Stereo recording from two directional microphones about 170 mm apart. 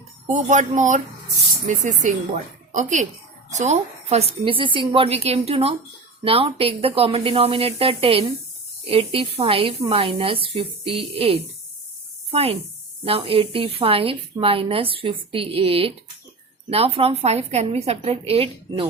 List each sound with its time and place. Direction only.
0.3 s a woman's voice: 45° right (ahead or behind)